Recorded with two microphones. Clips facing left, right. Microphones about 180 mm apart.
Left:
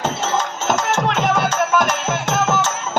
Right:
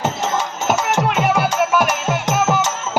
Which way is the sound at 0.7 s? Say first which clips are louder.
Right 1 dB; 10° right (ahead or behind).